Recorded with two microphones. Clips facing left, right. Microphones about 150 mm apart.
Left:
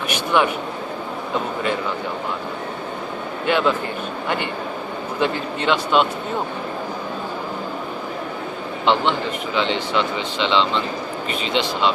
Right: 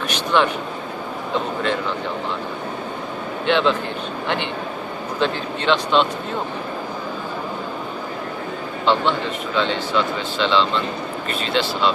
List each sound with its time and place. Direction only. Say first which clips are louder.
0.1 s vehicle: even; 10° left (ahead or behind)
3.4 s speech: right 1 dB; 5° left (ahead or behind)
5.2 s speech: even; 10° left (ahead or behind)
8.8 s speech: even; 15° left (ahead or behind)